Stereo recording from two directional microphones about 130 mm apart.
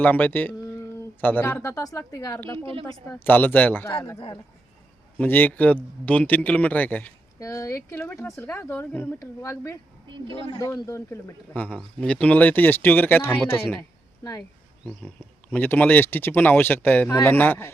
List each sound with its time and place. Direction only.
0.0 s speech: 15° left (ahead or behind)
2.6 s speech: 45° right (ahead or behind)
3.1 s speech: 15° left (ahead or behind)
5.2 s speech: 15° left (ahead or behind)
7.3 s speech: 25° left (ahead or behind)
14.8 s speech: 10° left (ahead or behind)